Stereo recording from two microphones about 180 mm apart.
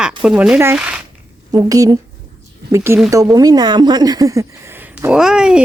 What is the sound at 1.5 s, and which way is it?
A woman's voice, 20° right (ahead or behind).